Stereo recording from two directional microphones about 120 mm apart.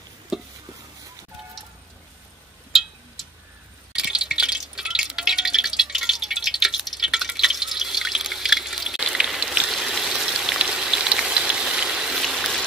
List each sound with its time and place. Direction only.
0.3 s stir: centre (ahead or behind)
3.9 s drip: 5° right (ahead or behind)